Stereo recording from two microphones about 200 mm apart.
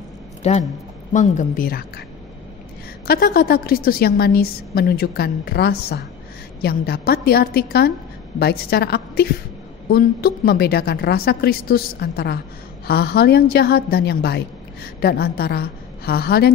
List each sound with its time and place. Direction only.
0.4 s a woman's voice: 35° left (ahead or behind); by 2.0 s 50° left (ahead or behind)
3.1 s a woman's voice: 50° left (ahead or behind)